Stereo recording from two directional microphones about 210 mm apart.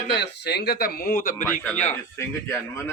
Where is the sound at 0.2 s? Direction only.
55° left (ahead or behind); by 2.0 s 35° left (ahead or behind).